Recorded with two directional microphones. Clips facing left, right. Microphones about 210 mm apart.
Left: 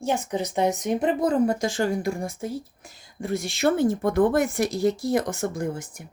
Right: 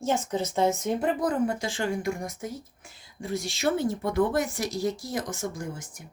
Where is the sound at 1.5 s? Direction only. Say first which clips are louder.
Left 5 dB; 45° left (ahead or behind).